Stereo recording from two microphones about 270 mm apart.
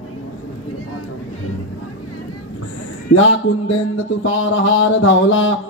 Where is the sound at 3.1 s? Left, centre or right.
Left.